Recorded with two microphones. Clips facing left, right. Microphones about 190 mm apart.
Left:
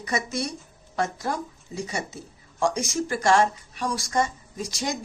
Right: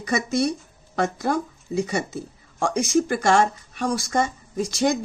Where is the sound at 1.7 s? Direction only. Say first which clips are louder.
Right 7 dB; 55° right (ahead or behind).